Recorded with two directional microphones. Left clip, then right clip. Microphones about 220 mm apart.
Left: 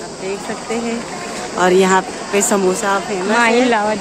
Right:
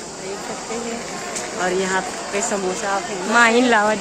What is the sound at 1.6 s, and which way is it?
Speech, 50° left (ahead or behind).